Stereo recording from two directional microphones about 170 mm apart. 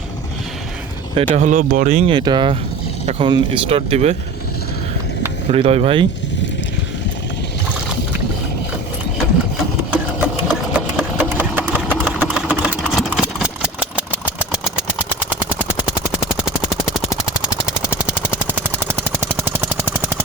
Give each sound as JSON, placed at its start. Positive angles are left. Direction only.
{"t": 1.4, "sound": "speech", "side_deg": -50}
{"t": 2.1, "sound": "speech", "side_deg": -25}
{"t": 5.5, "sound": "speech", "side_deg": -35}
{"t": 9.9, "sound": "sewing machine", "side_deg": -5}
{"t": 17.7, "sound": "machine gun", "side_deg": -5}